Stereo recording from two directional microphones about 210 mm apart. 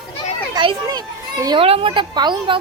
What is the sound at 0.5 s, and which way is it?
Children playing, 20° right (ahead or behind).